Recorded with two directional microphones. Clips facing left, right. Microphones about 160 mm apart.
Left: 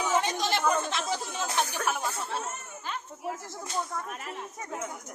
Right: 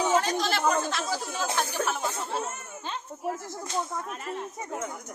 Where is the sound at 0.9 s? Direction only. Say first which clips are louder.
Right 1 dB; 20° left (ahead or behind).